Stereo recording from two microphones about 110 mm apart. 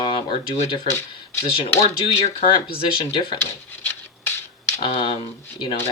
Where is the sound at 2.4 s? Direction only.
50° left (ahead or behind).